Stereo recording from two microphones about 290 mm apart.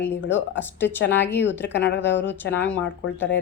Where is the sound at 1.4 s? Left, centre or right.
Left.